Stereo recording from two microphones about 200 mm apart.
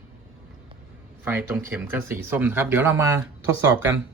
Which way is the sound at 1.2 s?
10° right (ahead or behind).